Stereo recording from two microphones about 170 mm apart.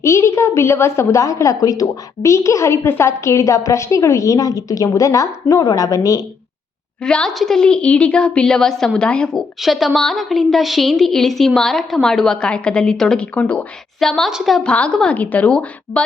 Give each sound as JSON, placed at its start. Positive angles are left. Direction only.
{"t": 0.0, "sound": "a woman's voice", "side_deg": 15}
{"t": 7.0, "sound": "a woman's voice", "side_deg": 5}